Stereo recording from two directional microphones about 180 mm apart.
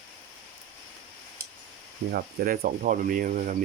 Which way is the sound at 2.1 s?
50° right (ahead or behind).